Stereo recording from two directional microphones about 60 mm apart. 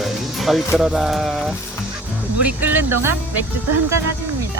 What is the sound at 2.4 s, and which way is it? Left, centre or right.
Speech, right.